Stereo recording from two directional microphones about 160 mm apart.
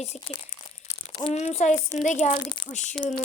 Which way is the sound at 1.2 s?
45° left (ahead or behind).